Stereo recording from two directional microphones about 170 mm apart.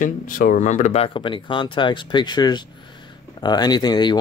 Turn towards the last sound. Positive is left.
turn(degrees=25)  # may be behind; listen again after turning